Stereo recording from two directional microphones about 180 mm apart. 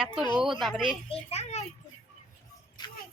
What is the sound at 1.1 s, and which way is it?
Speech, 35° left (ahead or behind).